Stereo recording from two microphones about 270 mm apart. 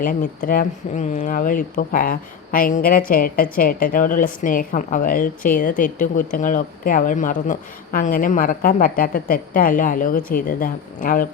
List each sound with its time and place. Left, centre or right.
0.0 s speech: left